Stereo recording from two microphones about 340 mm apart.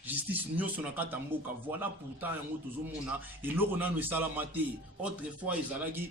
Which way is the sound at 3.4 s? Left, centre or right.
Centre.